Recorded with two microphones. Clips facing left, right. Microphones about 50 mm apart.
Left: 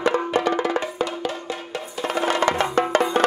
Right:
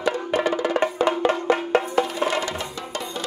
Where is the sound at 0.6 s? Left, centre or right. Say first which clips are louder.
Right 3 dB; right.